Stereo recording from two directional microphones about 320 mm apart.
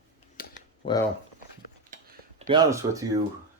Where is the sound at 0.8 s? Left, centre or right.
Centre.